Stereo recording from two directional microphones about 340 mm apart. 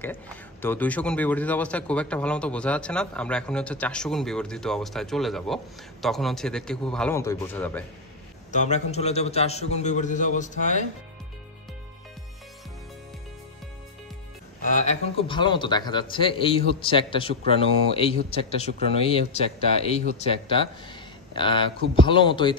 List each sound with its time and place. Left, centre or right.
0.0 s speech: centre
8.5 s a man's voice: left
14.8 s speech: centre